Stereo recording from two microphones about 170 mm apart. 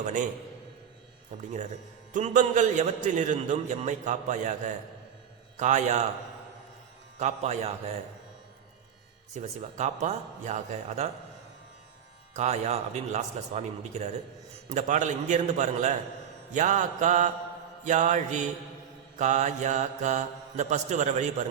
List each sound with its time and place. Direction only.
0.0 s a man's voice: 45° right (ahead or behind)
1.3 s a man's voice: 45° right (ahead or behind)
7.2 s speech: 40° right (ahead or behind)
9.3 s a man's voice: 45° right (ahead or behind)
12.3 s a man's voice: 40° right (ahead or behind)